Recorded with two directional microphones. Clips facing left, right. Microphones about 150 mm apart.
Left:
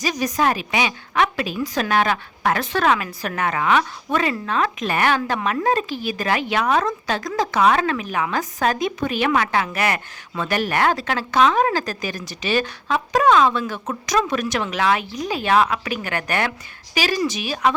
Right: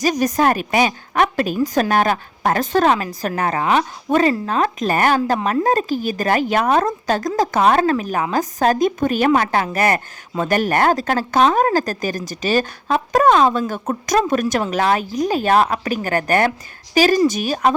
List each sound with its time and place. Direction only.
0.0 s a woman's voice: 45° right (ahead or behind)